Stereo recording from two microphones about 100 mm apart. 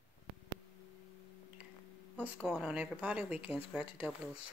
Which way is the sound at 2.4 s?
5° right (ahead or behind).